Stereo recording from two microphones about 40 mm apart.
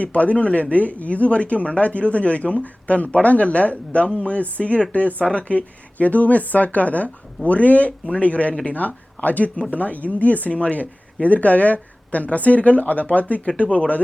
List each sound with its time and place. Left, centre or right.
0.0 s speech: left
5.2 s speech: left